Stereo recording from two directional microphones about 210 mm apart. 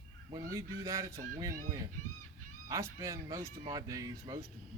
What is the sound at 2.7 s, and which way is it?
Speech, 15° right (ahead or behind).